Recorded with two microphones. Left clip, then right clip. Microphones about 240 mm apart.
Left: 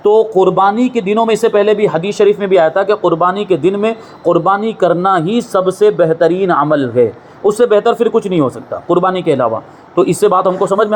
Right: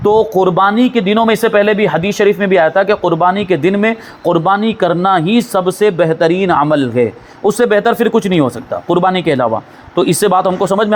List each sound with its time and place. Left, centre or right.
0.3 s speech: right